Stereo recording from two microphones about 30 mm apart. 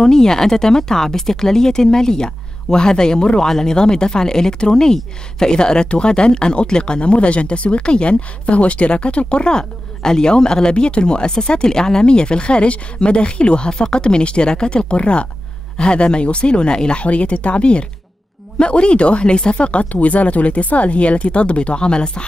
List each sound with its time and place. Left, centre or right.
0.0 s speech: centre
3.4 s speech: centre
3.7 s speech: left
7.0 s speech: left
17.0 s speech: left
19.9 s speech: left